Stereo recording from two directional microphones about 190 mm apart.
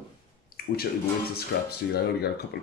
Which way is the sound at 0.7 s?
55° left (ahead or behind).